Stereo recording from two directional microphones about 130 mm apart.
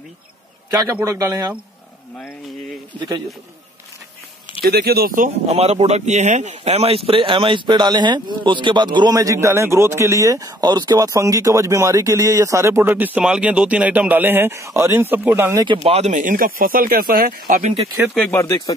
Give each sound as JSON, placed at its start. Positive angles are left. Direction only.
{"t": 0.7, "sound": "a man's voice", "side_deg": -25}
{"t": 5.0, "sound": "speech", "side_deg": -90}
{"t": 5.5, "sound": "speech", "side_deg": -55}
{"t": 15.6, "sound": "speech", "side_deg": -45}
{"t": 16.1, "sound": "speech", "side_deg": -85}